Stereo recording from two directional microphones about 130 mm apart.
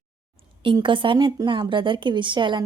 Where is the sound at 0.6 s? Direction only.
40° right (ahead or behind).